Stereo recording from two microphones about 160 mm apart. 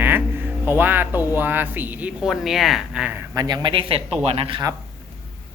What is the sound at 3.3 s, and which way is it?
Speech, 25° right (ahead or behind).